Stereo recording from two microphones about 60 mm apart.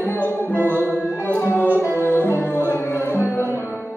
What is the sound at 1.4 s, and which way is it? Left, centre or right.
Music, left.